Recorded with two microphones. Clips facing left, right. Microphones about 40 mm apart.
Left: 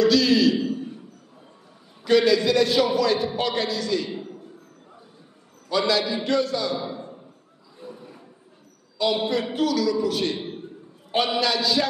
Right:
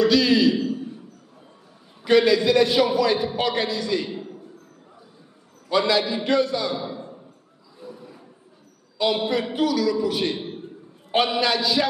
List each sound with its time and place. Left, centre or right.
0.0 s a man's voice: centre
2.0 s a man's voice: centre
5.7 s a man's voice: centre
7.8 s a sound: centre
8.9 s a man's voice: centre
11.2 s a man's voice: right